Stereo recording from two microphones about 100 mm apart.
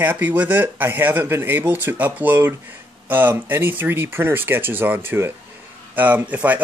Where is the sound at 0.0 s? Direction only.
20° right (ahead or behind).